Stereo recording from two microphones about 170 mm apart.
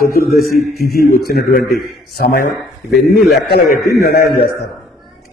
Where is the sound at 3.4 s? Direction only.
70° left (ahead or behind).